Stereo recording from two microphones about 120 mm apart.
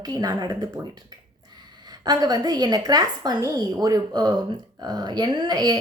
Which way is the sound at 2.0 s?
30° right (ahead or behind).